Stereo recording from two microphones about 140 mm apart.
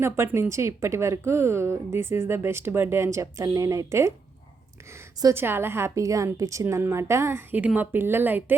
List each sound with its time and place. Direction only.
0.0 s a woman's voice: 20° right (ahead or behind)